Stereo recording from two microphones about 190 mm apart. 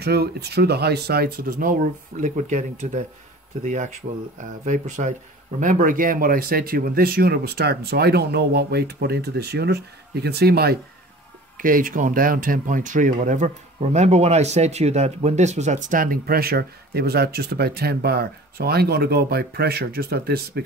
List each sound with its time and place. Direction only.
0.0 s speech: 60° right (ahead or behind)